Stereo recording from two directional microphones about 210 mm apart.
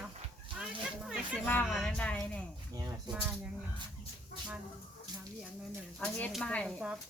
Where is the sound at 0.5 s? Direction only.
5° right (ahead or behind).